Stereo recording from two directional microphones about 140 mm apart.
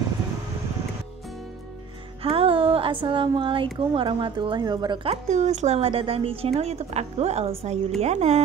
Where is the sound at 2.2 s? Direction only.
40° right (ahead or behind).